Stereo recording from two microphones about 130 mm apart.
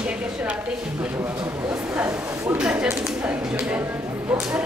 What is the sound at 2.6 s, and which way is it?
Speech, 10° right (ahead or behind).